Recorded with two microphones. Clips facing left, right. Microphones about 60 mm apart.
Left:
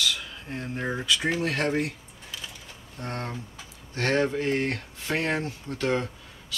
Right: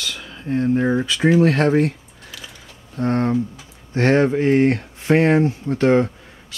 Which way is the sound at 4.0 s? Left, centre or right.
Right.